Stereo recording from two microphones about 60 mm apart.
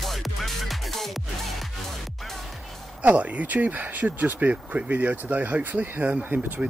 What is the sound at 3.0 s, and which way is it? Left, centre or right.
Speech, right.